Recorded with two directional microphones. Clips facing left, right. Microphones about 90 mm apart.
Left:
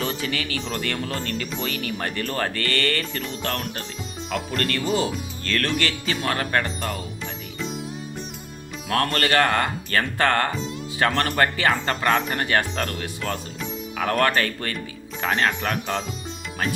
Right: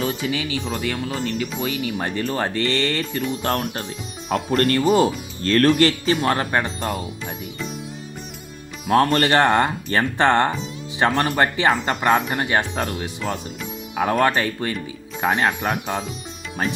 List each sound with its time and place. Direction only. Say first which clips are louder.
0.0 s speech: right 3 dB; 10° right (ahead or behind)
3.4 s speech: right 5 dB; 35° right (ahead or behind)
9.1 s speech: right 4 dB; 25° right (ahead or behind)
11.1 s speech: right 3 dB; 10° right (ahead or behind)
11.3 s speech: right 2 dB; 20° right (ahead or behind)